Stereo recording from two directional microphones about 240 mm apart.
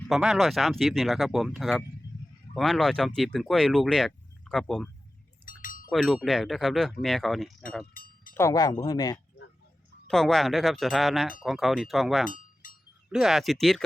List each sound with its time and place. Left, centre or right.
0.1 s speech: centre
5.5 s wind chime: left
5.9 s speech: centre
7.9 s a sound: left
8.4 s speech: centre
10.1 s speech: centre